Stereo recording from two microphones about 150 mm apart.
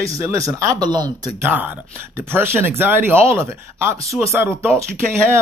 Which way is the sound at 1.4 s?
10° right (ahead or behind).